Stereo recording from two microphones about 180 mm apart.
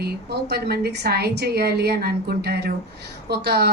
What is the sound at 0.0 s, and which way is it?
A woman's voice, 65° right (ahead or behind).